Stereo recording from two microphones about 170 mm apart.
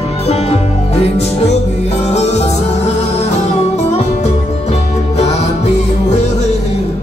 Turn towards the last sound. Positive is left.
turn(degrees=40)  # may be behind; listen again after turning